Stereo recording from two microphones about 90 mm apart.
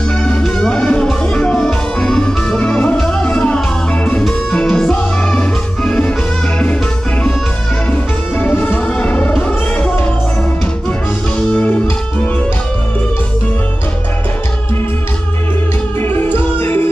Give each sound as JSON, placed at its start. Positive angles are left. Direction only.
{"t": 0.2, "sound": "music", "side_deg": 10}
{"t": 7.9, "sound": "music", "side_deg": 20}
{"t": 11.3, "sound": "music", "side_deg": 10}
{"t": 16.0, "sound": "music", "side_deg": 20}